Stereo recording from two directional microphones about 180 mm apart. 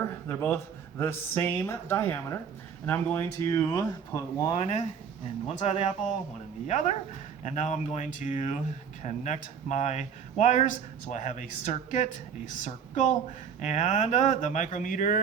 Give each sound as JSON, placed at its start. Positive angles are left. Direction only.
{"t": 0.3, "sound": "speech", "side_deg": 15}
{"t": 4.5, "sound": "speech", "side_deg": 35}